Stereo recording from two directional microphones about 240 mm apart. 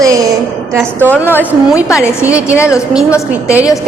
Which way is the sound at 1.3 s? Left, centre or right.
Centre.